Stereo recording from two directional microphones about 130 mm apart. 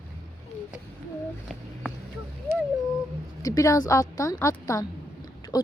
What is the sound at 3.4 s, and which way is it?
A woman's voice, 25° left (ahead or behind).